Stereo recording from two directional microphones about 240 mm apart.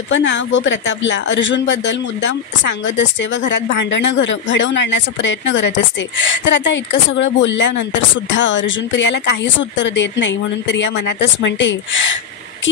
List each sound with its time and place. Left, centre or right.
0.1 s speech: left